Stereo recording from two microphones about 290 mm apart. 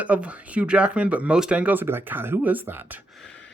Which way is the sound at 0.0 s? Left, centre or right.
Centre.